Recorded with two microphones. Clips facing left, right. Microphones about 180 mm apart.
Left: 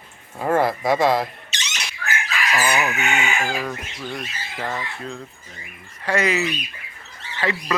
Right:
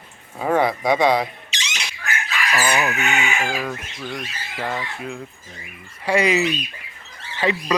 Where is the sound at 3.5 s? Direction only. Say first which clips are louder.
Even; centre (ahead or behind).